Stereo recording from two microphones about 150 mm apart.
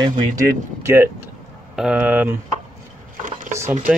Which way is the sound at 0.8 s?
15° right (ahead or behind).